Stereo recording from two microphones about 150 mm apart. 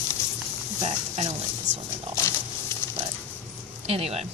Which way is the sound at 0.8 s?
45° right (ahead or behind).